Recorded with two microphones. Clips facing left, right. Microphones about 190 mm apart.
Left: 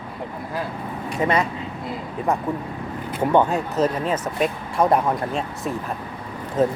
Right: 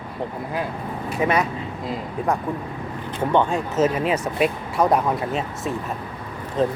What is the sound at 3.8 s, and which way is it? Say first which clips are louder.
Speech: right 3 dB; 10° right (ahead or behind).